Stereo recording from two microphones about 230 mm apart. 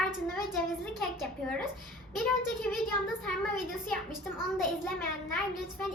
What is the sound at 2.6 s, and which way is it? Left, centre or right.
A woman's voice, centre.